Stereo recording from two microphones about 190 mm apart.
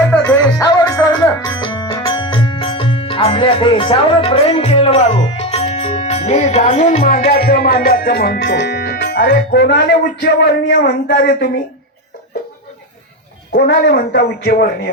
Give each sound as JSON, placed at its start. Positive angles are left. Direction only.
{"t": 0.1, "sound": "music", "side_deg": 10}
{"t": 13.5, "sound": "a woman's voice", "side_deg": 55}